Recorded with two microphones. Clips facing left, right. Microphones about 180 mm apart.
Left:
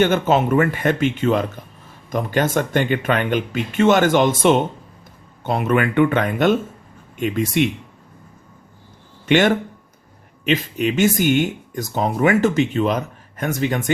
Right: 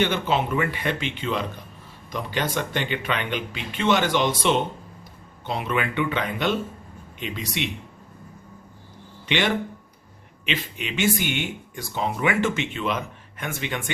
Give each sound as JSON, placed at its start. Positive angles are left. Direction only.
{"t": 0.0, "sound": "speech", "side_deg": 45}
{"t": 9.2, "sound": "speech", "side_deg": 45}